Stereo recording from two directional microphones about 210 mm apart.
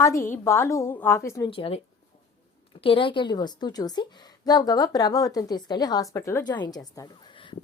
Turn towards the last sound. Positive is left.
turn(degrees=20)  # may be behind; listen again after turning